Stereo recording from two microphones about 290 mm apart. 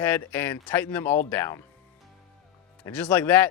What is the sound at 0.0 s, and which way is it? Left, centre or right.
Speech, centre.